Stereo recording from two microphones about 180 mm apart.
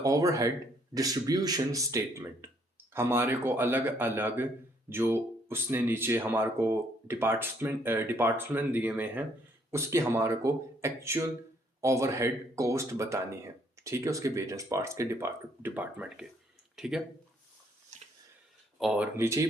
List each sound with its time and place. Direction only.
0.0 s speech: 20° right (ahead or behind); by 17.0 s centre (ahead or behind)
17.9 s a sound: 40° right (ahead or behind)
18.8 s speech: centre (ahead or behind)
19.1 s speech: 15° right (ahead or behind)